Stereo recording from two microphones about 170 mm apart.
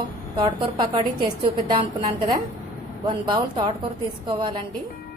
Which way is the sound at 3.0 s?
25° right (ahead or behind).